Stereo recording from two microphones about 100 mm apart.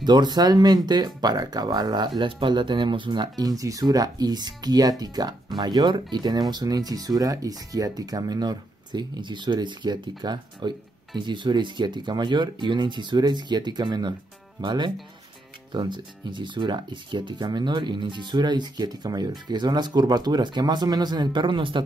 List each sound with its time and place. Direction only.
0.0 s speech: 45° right (ahead or behind)